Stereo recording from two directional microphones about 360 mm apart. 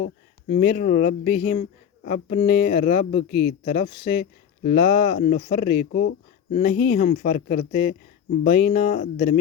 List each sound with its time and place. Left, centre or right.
0.0 s speech: left